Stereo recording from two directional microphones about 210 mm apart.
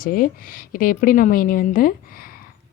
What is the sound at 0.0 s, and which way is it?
A woman's voice, 40° left (ahead or behind).